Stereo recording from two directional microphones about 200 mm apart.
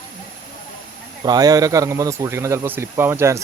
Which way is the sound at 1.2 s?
20° right (ahead or behind).